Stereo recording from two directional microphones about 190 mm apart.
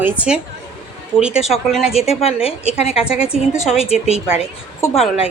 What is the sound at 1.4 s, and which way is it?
Speech, centre (ahead or behind).